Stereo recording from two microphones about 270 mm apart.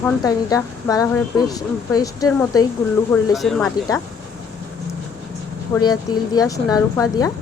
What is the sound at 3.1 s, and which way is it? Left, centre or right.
Speech, centre.